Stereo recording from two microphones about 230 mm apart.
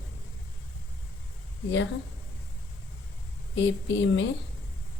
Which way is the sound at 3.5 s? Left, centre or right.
Left.